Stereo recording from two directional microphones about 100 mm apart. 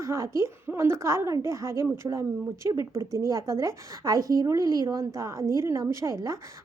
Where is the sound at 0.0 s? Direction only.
30° right (ahead or behind).